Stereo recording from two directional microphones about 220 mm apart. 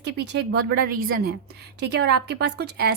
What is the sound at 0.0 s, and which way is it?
A woman's voice, 50° right (ahead or behind).